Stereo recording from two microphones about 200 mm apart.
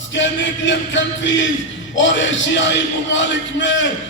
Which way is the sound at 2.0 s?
70° left (ahead or behind).